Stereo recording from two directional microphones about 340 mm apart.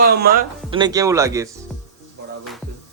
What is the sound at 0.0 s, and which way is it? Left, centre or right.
Speech, right.